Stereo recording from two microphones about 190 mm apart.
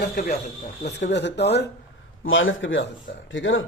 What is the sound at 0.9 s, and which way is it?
Speech, 65° left (ahead or behind).